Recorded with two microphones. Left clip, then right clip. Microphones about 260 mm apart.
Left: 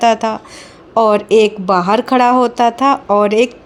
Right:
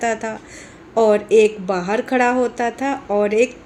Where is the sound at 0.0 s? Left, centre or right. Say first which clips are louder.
Left 9 dB; left.